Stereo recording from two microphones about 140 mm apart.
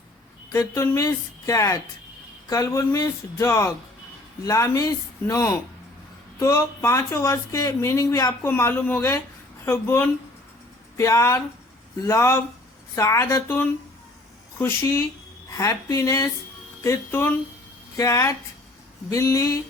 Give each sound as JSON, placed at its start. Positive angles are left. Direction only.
{"t": 0.6, "sound": "speech", "side_deg": 20}